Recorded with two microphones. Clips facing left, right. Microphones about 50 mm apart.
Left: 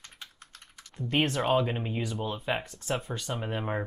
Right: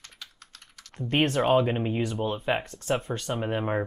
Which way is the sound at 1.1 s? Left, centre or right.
Right.